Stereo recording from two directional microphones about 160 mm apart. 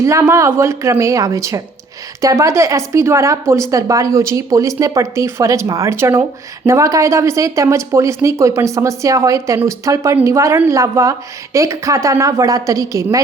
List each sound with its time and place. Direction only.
0.0 s speech: 15° right (ahead or behind)